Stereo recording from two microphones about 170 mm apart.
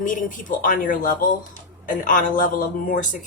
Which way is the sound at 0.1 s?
50° left (ahead or behind).